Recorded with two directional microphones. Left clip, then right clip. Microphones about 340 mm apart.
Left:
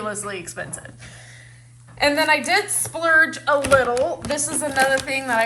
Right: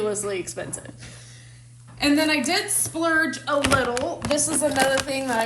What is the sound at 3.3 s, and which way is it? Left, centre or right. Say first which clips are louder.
A woman's voice: left 4 dB; centre.